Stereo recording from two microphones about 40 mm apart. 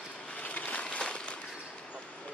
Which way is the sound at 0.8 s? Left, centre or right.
Left.